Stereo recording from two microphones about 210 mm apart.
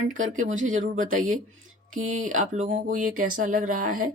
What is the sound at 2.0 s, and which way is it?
Speech, 80° right.